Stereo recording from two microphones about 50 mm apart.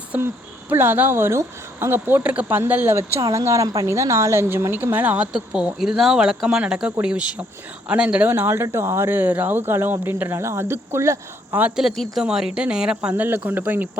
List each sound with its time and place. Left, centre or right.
0.1 s speech: right
2.2 s speech: right
2.5 s speech: right
2.9 s a woman's voice: right
4.7 s speech: right
5.8 s speech: centre
8.4 s speech: right
11.5 s speech: right
12.2 s speech: centre
13.1 s speech: right